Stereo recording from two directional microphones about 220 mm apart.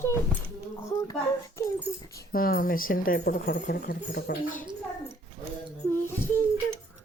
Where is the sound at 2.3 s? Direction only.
40° left (ahead or behind).